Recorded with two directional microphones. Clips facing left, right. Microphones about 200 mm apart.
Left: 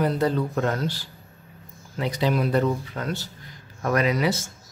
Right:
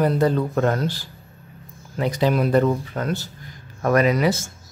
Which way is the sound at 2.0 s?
50° right (ahead or behind).